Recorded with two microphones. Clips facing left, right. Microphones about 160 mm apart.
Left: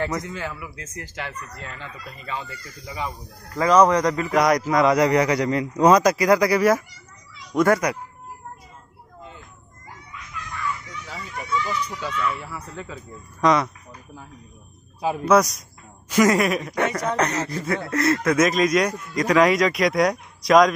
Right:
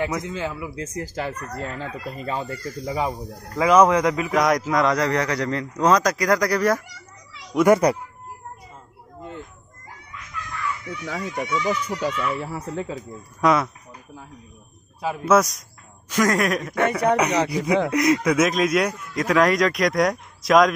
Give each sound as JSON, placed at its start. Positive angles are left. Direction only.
{"t": 0.2, "sound": "speech", "side_deg": -20}
{"t": 3.5, "sound": "speech", "side_deg": -10}
{"t": 7.5, "sound": "speech", "side_deg": -15}
{"t": 10.9, "sound": "speech", "side_deg": -75}
{"t": 12.1, "sound": "speech", "side_deg": -15}
{"t": 12.4, "sound": "speech", "side_deg": -40}
{"t": 13.4, "sound": "speech", "side_deg": -5}
{"t": 15.2, "sound": "speech", "side_deg": 0}
{"t": 17.2, "sound": "speech", "side_deg": -10}